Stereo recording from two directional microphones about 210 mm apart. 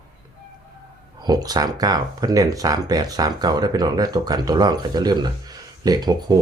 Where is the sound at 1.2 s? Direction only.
20° right (ahead or behind).